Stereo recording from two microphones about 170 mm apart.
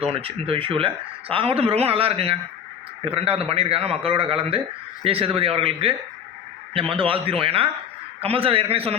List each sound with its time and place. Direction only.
0.1 s speech: 35° right (ahead or behind)
6.9 s speech: 30° right (ahead or behind)